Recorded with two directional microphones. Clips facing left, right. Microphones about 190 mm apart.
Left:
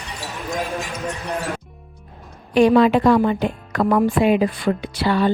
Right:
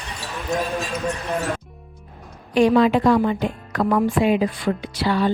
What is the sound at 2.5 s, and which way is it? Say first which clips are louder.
A woman's voice: left 2 dB; 60° left (ahead or behind).